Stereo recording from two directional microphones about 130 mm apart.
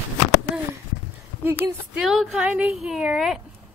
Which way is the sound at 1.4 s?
15° right (ahead or behind).